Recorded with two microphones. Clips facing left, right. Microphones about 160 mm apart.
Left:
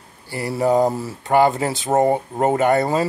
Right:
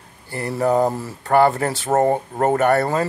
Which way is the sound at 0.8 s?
5° left (ahead or behind).